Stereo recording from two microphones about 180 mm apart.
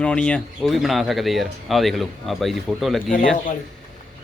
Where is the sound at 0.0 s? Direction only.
5° left (ahead or behind).